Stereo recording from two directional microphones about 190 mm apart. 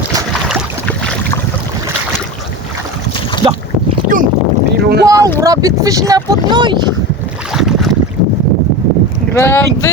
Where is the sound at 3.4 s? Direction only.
25° right (ahead or behind).